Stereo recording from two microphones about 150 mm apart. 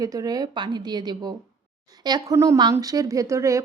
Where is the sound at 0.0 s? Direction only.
25° right (ahead or behind).